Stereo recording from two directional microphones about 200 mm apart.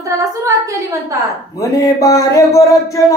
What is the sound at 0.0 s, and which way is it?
A woman's voice, 15° right (ahead or behind).